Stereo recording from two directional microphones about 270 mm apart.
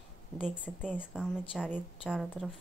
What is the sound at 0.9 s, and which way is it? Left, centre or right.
A woman's voice, centre.